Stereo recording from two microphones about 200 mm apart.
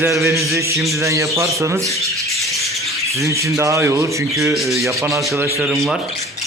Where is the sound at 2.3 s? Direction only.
Centre (ahead or behind).